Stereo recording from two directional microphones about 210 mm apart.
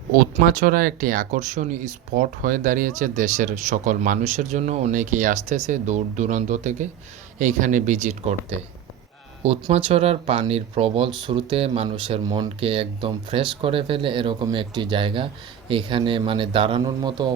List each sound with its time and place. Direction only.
0.5 s speech: 40° right (ahead or behind); by 17.3 s 20° right (ahead or behind)